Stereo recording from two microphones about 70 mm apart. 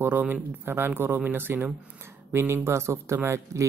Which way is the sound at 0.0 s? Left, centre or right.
Right.